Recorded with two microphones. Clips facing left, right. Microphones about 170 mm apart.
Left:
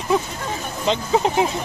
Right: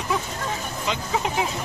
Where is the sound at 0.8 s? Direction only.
30° left (ahead or behind).